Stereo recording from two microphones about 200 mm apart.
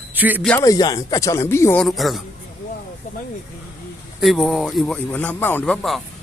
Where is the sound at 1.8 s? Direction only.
Centre (ahead or behind).